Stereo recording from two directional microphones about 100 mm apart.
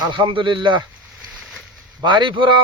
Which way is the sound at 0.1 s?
55° right (ahead or behind).